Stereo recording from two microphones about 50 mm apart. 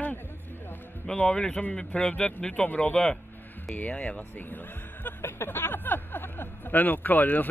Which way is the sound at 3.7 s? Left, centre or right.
Left.